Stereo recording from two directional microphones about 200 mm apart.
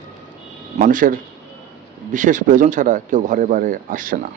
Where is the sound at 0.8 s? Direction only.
40° right (ahead or behind).